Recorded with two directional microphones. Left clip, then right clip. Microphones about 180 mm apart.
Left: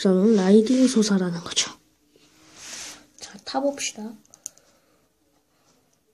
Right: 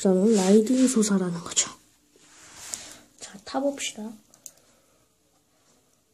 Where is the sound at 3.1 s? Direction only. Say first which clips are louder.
Left 2 dB; 10° left (ahead or behind).